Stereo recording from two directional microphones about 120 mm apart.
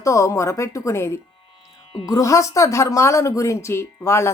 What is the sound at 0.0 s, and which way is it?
Speech, 25° left (ahead or behind).